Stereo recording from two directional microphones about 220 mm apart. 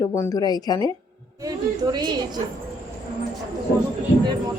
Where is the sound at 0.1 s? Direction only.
15° left (ahead or behind).